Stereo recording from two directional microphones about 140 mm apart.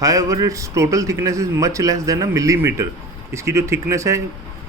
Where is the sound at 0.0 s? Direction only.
25° right (ahead or behind).